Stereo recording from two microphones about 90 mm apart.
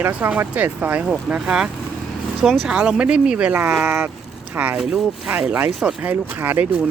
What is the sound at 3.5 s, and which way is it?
Speech, 25° right (ahead or behind).